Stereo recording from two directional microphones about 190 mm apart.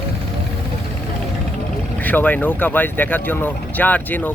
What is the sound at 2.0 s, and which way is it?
Speech, 10° left (ahead or behind).